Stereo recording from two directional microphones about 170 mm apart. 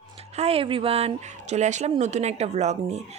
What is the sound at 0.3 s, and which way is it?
Speech, 35° right (ahead or behind).